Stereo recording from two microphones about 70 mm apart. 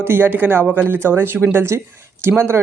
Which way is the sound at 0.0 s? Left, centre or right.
Right.